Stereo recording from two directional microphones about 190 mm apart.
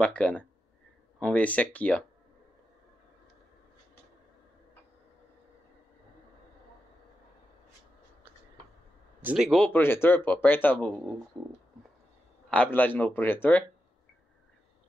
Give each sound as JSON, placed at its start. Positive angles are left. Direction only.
{"t": 0.0, "sound": "speech", "side_deg": 5}
{"t": 9.2, "sound": "speech", "side_deg": -5}
{"t": 12.4, "sound": "speech", "side_deg": 5}